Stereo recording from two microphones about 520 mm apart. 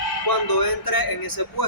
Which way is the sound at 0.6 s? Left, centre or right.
Left.